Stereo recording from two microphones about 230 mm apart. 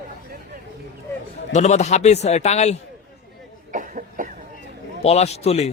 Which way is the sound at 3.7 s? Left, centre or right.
Right.